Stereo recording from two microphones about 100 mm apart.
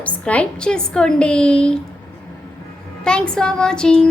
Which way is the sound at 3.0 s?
10° left (ahead or behind).